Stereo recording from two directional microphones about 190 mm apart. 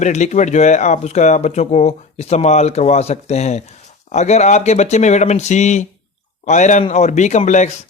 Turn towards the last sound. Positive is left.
turn(degrees=40)  # may be behind; listen again after turning